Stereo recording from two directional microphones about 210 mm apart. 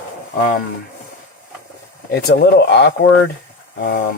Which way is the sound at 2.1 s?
50° left (ahead or behind).